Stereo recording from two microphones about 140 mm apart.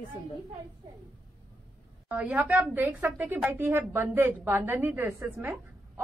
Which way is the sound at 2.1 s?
10° right (ahead or behind).